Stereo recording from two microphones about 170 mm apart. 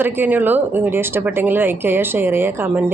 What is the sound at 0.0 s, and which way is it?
Speech, 10° right (ahead or behind).